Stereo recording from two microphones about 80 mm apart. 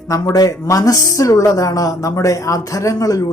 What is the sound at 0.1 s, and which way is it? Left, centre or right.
Speech, left.